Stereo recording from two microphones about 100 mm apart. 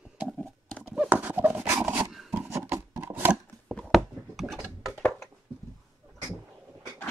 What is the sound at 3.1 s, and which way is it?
Chopping, 20° right (ahead or behind).